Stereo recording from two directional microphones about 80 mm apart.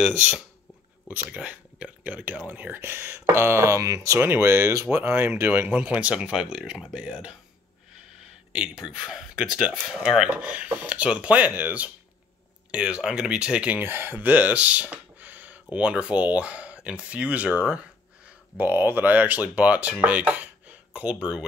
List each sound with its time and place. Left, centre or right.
0.0 s speech: centre; by 4.3 s right
4.3 s speech: right
5.7 s speech: centre
8.5 s speech: centre
13.8 s speech: right; by 21.5 s centre